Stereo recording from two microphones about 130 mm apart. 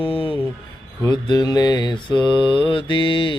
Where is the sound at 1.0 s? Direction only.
30° left (ahead or behind).